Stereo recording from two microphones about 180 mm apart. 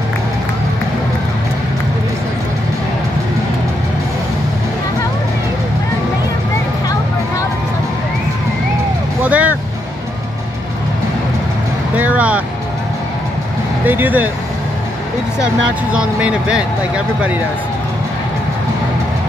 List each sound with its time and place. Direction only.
9.2 s vehicle: 10° right (ahead or behind)
12.0 s vehicle: 10° right (ahead or behind)
13.8 s speech: 10° right (ahead or behind)
15.4 s speech: 5° right (ahead or behind)